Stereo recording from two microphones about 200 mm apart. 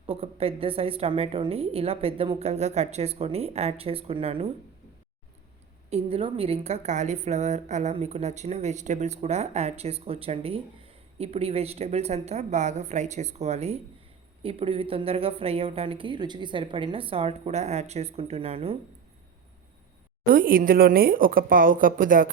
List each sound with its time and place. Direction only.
0.0 s a woman's voice: 30° right (ahead or behind)
5.9 s a woman's voice: 30° right (ahead or behind)
20.3 s a woman's voice: 45° right (ahead or behind)